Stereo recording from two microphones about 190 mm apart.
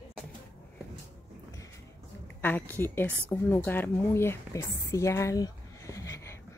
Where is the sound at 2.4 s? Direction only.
10° left (ahead or behind).